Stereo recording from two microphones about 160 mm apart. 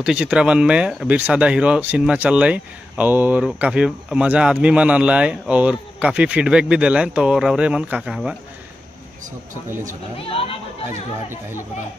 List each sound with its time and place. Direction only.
0.0 s speech: 5° right (ahead or behind)
10.2 s speech: 35° left (ahead or behind)